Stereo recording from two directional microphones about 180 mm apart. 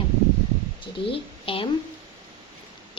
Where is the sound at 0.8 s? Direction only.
30° left (ahead or behind).